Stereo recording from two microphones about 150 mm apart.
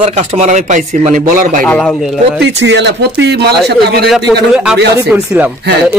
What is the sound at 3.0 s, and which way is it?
Speech, 90° right.